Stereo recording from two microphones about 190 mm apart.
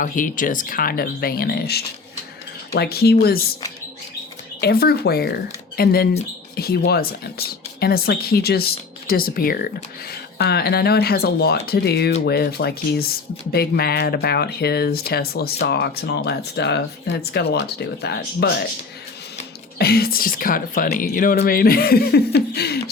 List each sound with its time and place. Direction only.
0.0 s speech: 45° left (ahead or behind)
4.6 s speech: 55° left (ahead or behind)
19.8 s speech: 55° left (ahead or behind)